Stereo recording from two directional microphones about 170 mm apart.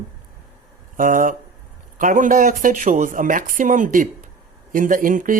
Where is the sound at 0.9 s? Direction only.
55° right (ahead or behind).